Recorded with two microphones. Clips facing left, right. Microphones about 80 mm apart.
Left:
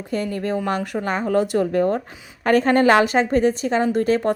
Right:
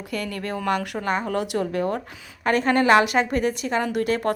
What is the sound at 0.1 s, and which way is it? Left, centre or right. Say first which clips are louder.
A woman's voice: left 6 dB; left.